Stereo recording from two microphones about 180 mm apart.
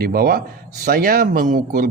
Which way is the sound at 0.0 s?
55° right (ahead or behind).